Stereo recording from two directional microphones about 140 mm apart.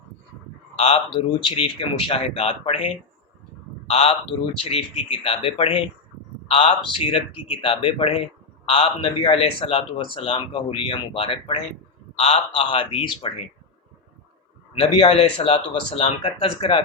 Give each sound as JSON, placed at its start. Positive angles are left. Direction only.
{"t": 0.8, "sound": "speech", "side_deg": 50}
{"t": 14.8, "sound": "speech", "side_deg": 45}